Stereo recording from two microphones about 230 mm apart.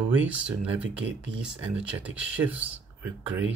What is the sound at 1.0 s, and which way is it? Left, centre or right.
Speech, right.